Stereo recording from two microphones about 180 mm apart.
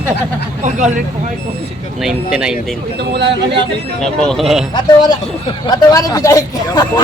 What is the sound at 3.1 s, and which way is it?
Speech, 80° right.